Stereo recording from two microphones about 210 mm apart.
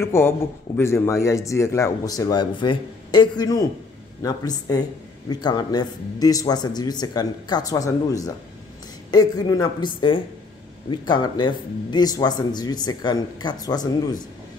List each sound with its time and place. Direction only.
0.0 s speech: 10° left (ahead or behind)